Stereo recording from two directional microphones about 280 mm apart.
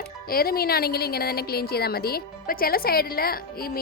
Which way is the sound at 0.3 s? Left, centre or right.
Left.